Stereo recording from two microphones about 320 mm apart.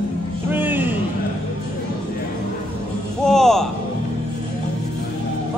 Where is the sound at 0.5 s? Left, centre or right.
Centre.